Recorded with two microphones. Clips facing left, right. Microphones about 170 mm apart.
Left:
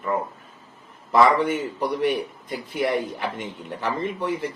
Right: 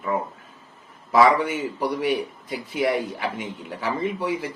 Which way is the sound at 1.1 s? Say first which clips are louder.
Even; 5° right (ahead or behind).